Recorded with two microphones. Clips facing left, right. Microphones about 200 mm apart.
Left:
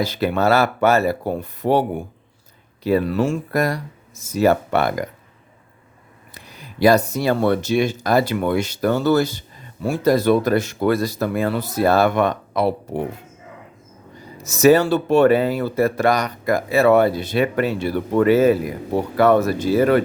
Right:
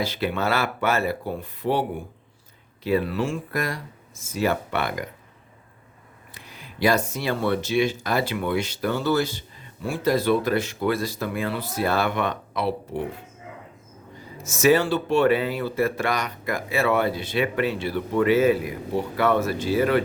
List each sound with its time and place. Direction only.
0.0 s speech: 40° left (ahead or behind)
6.3 s speech: 40° left (ahead or behind)
14.4 s speech: 40° left (ahead or behind)